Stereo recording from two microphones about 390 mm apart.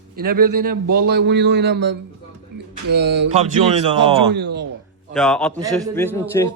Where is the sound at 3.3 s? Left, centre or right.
Centre.